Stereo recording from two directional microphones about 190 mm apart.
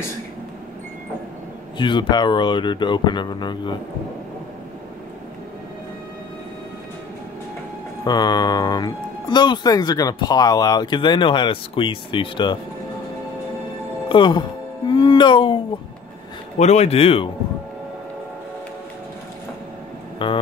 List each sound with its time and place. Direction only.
1.8 s speech: 25° left (ahead or behind)
8.0 s speech: 20° left (ahead or behind)
14.0 s speech: 25° left (ahead or behind)
20.2 s music: 25° left (ahead or behind)